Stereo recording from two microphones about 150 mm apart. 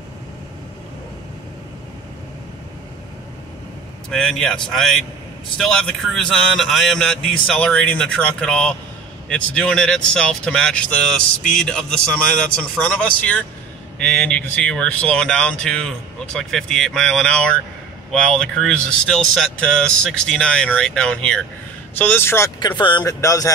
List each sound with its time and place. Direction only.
4.1 s speech: 5° left (ahead or behind)
22.6 s a man's voice: 30° left (ahead or behind)